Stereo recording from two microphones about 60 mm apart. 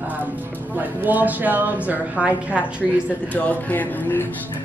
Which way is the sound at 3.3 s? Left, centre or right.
Left.